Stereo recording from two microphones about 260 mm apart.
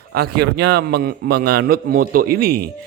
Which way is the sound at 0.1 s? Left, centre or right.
Right.